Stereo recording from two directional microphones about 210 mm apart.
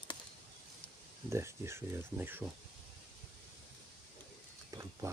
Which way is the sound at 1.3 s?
15° right (ahead or behind).